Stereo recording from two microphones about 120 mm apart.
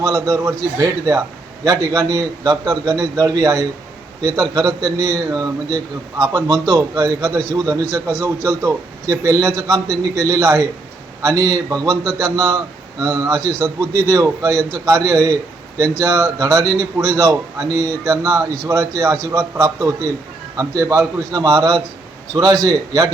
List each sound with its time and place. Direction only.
0.0 s a man's voice: 30° right (ahead or behind)
21.3 s a man's voice: 35° right (ahead or behind)